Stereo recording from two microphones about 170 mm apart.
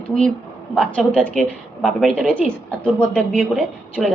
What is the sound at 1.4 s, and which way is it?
Speech, centre (ahead or behind).